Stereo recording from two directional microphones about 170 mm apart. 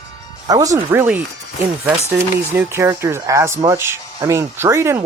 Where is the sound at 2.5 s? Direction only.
15° right (ahead or behind).